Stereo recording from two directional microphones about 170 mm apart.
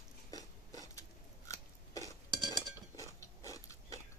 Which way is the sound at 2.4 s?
20° left (ahead or behind).